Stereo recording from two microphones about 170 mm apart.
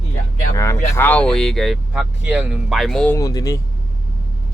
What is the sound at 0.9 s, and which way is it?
Speech, 10° left (ahead or behind).